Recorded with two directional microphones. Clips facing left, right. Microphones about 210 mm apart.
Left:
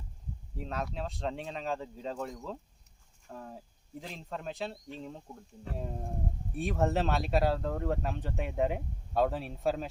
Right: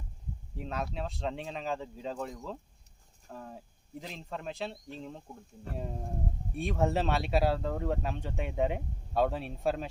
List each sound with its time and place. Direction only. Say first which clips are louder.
0.5 s speech: even; centre (ahead or behind)